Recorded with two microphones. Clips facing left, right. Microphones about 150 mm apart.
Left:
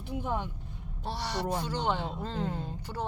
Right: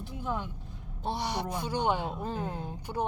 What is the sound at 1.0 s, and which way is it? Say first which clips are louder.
Speech: right 1 dB; 15° right (ahead or behind).